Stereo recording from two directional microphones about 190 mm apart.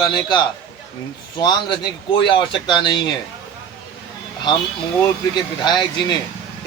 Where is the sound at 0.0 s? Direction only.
25° left (ahead or behind).